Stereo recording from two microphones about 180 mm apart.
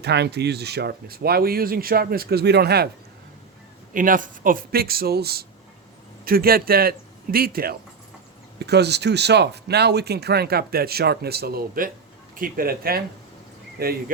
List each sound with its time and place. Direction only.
0.0 s speech: 70° right (ahead or behind)
3.9 s speech: 45° right (ahead or behind)
8.5 s speech: 65° right (ahead or behind)